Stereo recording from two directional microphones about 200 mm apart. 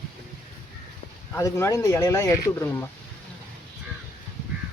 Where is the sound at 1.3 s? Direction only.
15° left (ahead or behind).